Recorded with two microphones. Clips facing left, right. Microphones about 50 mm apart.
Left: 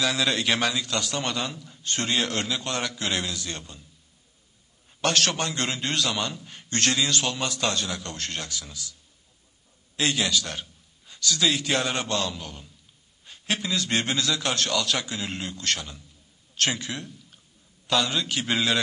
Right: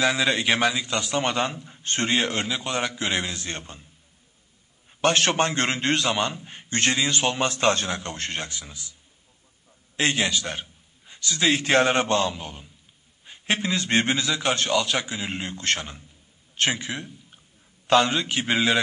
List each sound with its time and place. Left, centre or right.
0.0 s a man's voice: right
5.0 s a man's voice: right
9.9 s a man's voice: right
16.5 s speech: right
17.8 s a man's voice: right